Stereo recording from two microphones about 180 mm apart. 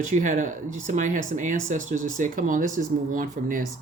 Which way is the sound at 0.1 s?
45° right (ahead or behind).